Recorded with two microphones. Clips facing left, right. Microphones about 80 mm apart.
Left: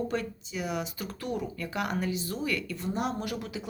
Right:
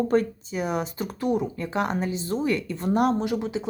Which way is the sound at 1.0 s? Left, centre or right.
Right.